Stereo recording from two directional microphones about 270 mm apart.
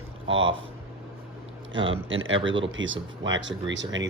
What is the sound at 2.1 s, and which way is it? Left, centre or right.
Speech, right.